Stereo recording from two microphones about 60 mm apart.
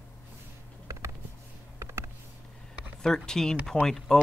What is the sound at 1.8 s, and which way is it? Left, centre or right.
Computer keyboard, right.